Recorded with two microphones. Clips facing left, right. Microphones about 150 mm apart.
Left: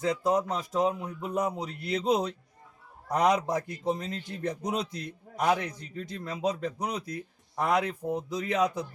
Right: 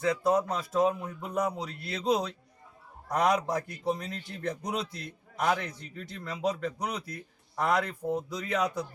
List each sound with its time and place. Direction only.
0.0 s a man's voice: 15° left (ahead or behind)